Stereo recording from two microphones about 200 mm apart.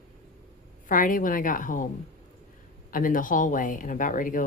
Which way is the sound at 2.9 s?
45° left (ahead or behind).